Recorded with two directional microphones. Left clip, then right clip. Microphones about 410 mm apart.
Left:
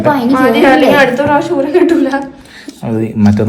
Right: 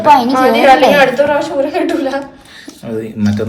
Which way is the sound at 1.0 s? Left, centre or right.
Centre.